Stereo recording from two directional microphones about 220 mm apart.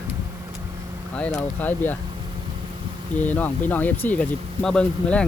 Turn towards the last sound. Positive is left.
turn(degrees=5)  # may be behind; listen again after turning